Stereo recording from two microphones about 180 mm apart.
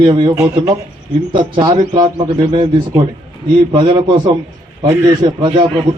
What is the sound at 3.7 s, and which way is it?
A man's voice, 25° right (ahead or behind).